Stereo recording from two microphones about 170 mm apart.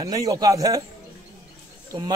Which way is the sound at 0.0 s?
20° right (ahead or behind).